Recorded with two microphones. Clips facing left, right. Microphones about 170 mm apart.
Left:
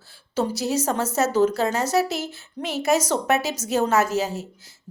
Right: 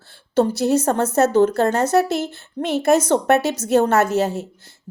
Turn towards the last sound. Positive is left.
turn(degrees=-60)  # may be behind; listen again after turning